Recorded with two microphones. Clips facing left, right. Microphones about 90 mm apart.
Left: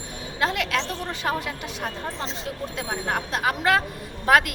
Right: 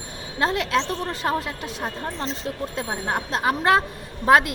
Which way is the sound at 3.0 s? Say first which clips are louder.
Right 2 dB; 25° right (ahead or behind).